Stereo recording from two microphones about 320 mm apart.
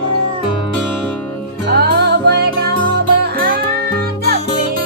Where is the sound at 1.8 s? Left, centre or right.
Right.